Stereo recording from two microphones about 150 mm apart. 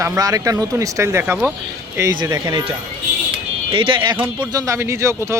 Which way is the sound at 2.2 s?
25° right (ahead or behind).